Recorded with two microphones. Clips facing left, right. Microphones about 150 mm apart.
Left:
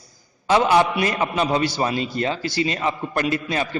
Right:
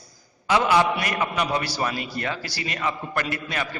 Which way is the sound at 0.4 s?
25° left (ahead or behind).